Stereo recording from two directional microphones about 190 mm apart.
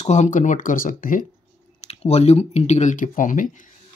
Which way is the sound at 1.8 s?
35° left (ahead or behind).